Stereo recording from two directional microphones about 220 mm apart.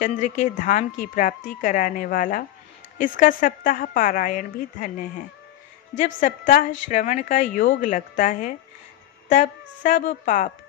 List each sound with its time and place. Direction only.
0.0 s a woman's voice: 35° left (ahead or behind)
5.9 s a woman's voice: 35° left (ahead or behind)